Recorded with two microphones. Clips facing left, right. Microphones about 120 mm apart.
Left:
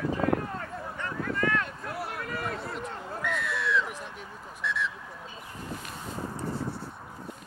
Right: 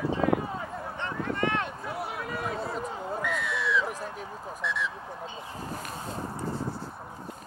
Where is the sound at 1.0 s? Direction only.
25° right (ahead or behind).